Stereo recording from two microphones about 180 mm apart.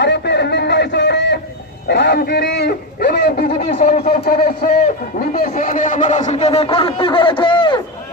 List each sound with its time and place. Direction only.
0.0 s a sound: 70° left (ahead or behind)
1.9 s a man's voice: 70° left (ahead or behind)
3.8 s speech: 40° left (ahead or behind)
4.3 s a man's voice: 55° left (ahead or behind); by 7.8 s 25° left (ahead or behind)